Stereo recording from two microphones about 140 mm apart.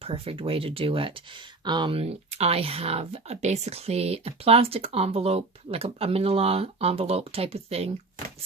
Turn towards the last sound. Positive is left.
turn(degrees=-45)  # may be behind; listen again after turning